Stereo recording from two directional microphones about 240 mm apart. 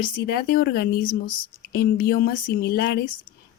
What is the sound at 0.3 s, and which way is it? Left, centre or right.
Speech, left.